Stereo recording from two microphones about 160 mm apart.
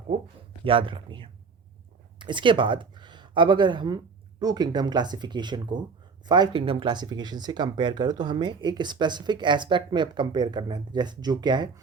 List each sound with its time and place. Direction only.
0.6 s speech: 35° right (ahead or behind)